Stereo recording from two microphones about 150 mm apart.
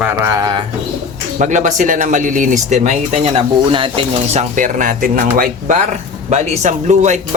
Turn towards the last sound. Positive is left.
turn(degrees=-50)  # may be behind; listen again after turning